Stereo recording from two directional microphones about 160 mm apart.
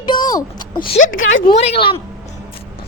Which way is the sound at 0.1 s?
25° left (ahead or behind).